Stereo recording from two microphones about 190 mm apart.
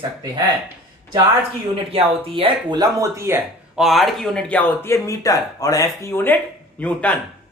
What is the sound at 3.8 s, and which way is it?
Speech, centre (ahead or behind).